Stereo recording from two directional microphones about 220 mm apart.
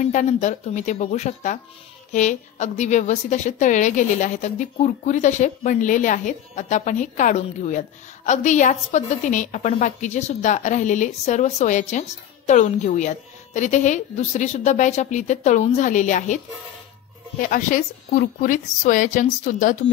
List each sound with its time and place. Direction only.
0.0 s a woman's voice: 35° left (ahead or behind)
17.4 s a woman's voice: 35° left (ahead or behind)